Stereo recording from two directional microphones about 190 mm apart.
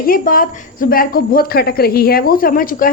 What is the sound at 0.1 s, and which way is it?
A woman's voice, 50° left (ahead or behind).